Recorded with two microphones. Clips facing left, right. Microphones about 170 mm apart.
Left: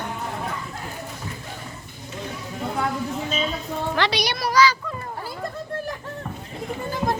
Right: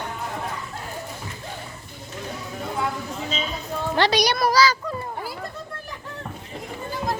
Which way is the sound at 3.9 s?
40° right (ahead or behind).